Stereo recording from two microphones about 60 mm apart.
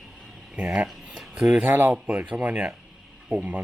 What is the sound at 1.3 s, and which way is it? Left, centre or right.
Speech, centre.